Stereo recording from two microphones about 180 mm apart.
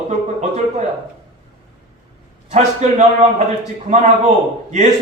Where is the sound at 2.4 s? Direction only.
40° right (ahead or behind).